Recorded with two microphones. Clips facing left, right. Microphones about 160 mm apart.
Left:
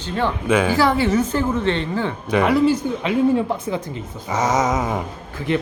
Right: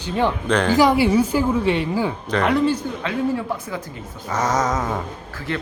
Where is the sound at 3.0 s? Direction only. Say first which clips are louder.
Left 7 dB; 25° left (ahead or behind).